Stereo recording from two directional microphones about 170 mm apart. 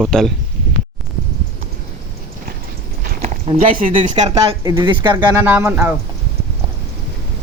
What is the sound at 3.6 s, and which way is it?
Speech, 55° right (ahead or behind).